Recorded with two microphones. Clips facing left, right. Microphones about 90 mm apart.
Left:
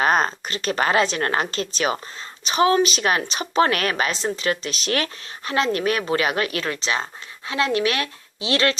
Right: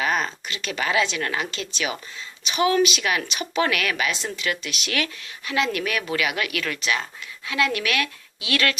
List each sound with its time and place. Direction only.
0.0 s speech: 40° left (ahead or behind)